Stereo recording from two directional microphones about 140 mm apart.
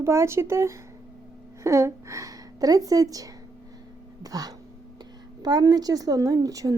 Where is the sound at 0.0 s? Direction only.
20° right (ahead or behind).